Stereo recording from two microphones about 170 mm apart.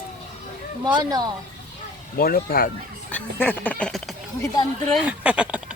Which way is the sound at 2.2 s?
60° left (ahead or behind).